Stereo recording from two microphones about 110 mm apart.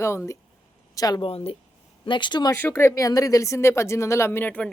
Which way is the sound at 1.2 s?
60° left (ahead or behind).